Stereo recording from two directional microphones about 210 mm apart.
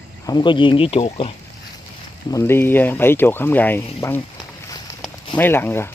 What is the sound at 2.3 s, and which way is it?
Speech, 10° left (ahead or behind).